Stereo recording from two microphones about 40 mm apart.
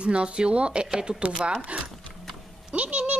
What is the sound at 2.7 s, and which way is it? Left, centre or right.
Speech, right.